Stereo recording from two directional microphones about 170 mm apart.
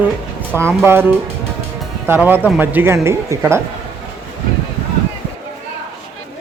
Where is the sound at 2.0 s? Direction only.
10° right (ahead or behind).